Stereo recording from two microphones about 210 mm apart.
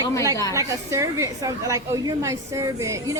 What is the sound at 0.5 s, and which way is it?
A woman's voice, 15° right (ahead or behind).